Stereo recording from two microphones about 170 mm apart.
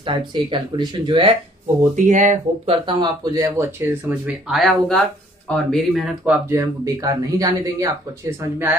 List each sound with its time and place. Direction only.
0.0 s speech: 30° right (ahead or behind)
2.0 s speech: 45° right (ahead or behind)
2.9 s speech: 25° right (ahead or behind)